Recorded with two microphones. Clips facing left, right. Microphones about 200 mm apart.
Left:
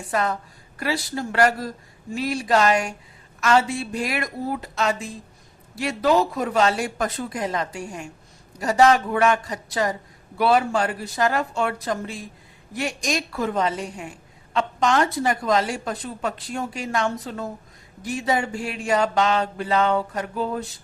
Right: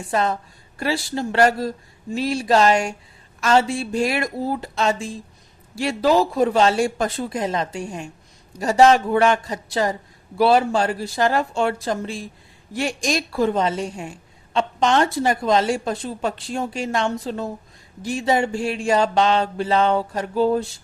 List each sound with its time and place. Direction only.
0.1 s speech: 25° right (ahead or behind)